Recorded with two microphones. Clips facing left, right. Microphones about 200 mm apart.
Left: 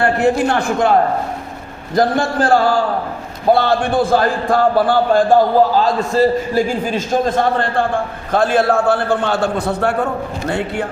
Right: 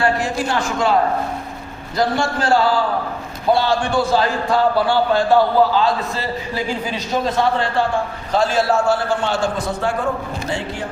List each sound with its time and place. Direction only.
0.0 s a man's voice: 60° left (ahead or behind)
2.0 s a man's voice: 55° left (ahead or behind)